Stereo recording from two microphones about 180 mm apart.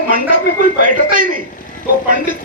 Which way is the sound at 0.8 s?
45° right (ahead or behind).